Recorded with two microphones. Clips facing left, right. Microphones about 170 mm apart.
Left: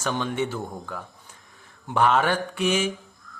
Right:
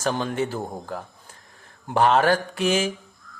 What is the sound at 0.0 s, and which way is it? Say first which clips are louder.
Speech: right 2 dB; 35° right (ahead or behind).